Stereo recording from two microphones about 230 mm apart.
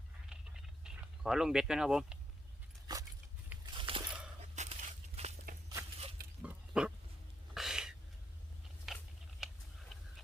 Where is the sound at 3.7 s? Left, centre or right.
Right.